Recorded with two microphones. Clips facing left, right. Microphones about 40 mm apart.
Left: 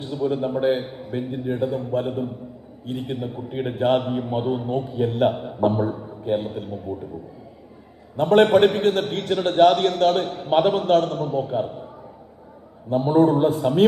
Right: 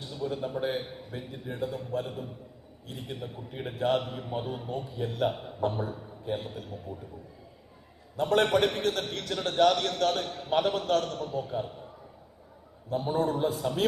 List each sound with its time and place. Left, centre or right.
0.0 s a man's voice: left
8.1 s a man's voice: left
12.9 s a man's voice: left